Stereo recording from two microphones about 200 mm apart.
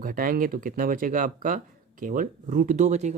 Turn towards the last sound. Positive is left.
turn(degrees=-35)  # may be behind; listen again after turning